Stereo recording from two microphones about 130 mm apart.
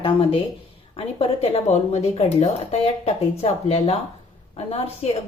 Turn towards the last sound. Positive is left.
turn(degrees=50)  # may be behind; listen again after turning